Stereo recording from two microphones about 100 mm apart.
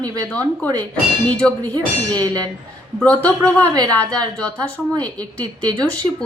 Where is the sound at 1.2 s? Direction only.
15° left (ahead or behind).